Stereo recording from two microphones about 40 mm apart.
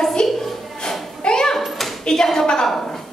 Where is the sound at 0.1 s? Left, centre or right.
Centre.